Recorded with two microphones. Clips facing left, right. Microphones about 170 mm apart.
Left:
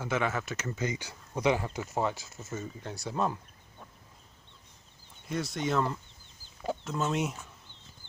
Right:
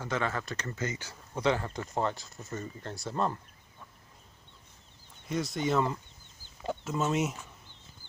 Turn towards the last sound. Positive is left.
turn(degrees=0)  # may be behind; listen again after turning